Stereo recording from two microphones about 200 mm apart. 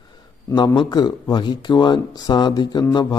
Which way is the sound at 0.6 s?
20° left (ahead or behind).